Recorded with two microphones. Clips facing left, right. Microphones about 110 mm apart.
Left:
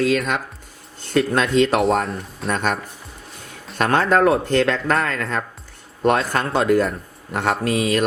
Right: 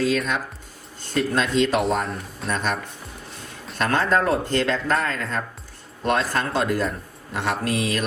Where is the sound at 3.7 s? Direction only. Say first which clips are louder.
Left 4 dB; 55° left (ahead or behind).